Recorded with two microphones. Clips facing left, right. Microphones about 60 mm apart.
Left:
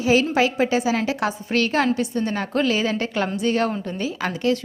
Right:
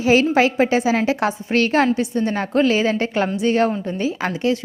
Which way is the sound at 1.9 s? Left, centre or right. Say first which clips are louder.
Right 3 dB; right.